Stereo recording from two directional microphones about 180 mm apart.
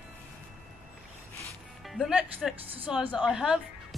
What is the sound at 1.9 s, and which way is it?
Speech, 5° right (ahead or behind).